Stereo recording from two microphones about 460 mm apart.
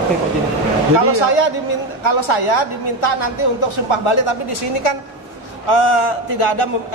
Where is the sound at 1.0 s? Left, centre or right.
Left.